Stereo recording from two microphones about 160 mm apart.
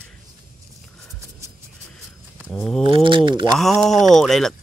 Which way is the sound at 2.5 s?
5° left (ahead or behind).